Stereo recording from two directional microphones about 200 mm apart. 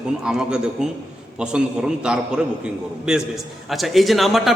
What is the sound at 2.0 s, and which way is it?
A man's voice, 5° right (ahead or behind).